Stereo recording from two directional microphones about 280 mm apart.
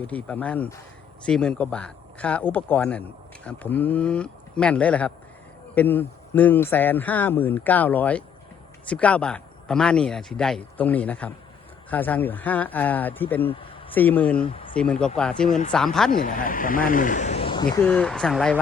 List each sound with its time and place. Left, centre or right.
0.1 s speech: centre
14.4 s speech: centre
14.8 s speech: centre
15.4 s speech: left
15.7 s speech: centre
16.1 s speech: left; by 18.6 s centre